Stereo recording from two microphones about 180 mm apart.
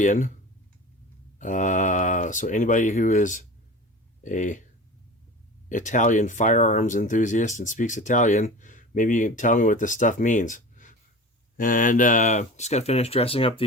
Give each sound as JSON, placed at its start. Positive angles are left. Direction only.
{"t": 0.0, "sound": "speech", "side_deg": 45}
{"t": 1.4, "sound": "speech", "side_deg": 45}
{"t": 5.6, "sound": "speech", "side_deg": 45}